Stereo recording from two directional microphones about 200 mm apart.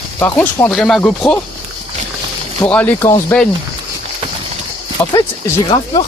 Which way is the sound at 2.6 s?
5° left (ahead or behind).